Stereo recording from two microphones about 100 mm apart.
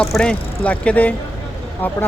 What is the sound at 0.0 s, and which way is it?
Speech, 5° left (ahead or behind).